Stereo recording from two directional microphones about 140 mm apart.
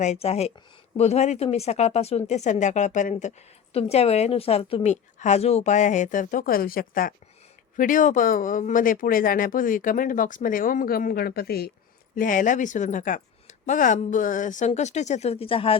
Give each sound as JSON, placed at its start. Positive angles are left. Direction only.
{"t": 0.0, "sound": "speech", "side_deg": 50}
{"t": 7.8, "sound": "speech", "side_deg": 70}
{"t": 12.1, "sound": "speech", "side_deg": 75}